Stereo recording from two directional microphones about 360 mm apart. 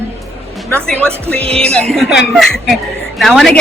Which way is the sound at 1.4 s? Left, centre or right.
Centre.